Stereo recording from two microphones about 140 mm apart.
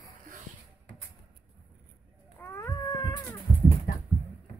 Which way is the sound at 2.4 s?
20° left (ahead or behind).